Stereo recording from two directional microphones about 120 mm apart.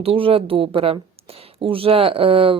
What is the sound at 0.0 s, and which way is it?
Speech, 50° right (ahead or behind).